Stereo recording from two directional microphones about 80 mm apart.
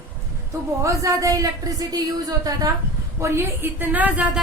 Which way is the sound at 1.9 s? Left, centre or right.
Right.